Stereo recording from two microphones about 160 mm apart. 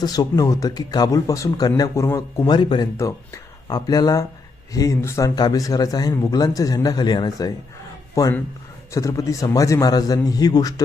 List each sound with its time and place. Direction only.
0.0 s speech: 25° left (ahead or behind)